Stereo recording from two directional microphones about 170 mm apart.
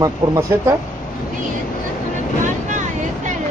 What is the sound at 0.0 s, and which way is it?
Speech, 20° right (ahead or behind).